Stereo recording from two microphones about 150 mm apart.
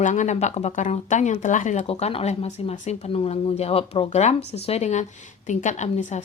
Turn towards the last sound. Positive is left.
turn(degrees=50)  # may be behind; listen again after turning